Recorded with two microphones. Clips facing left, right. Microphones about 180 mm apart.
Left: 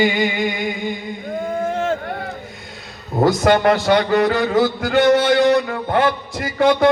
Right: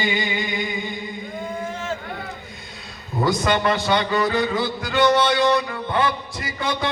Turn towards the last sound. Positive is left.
turn(degrees=50)  # may be behind; listen again after turning